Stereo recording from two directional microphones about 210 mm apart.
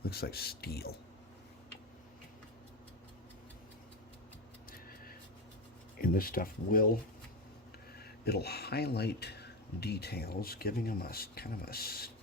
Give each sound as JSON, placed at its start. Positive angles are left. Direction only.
{"t": 0.0, "sound": "speech", "side_deg": 45}
{"t": 4.7, "sound": "a sound", "side_deg": 45}
{"t": 6.0, "sound": "speech", "side_deg": 45}
{"t": 7.9, "sound": "speech", "side_deg": 50}